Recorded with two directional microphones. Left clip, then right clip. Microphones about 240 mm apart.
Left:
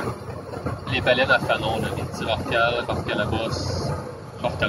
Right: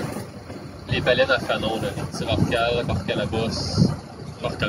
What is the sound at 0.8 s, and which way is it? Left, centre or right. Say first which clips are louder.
Speech: even; right.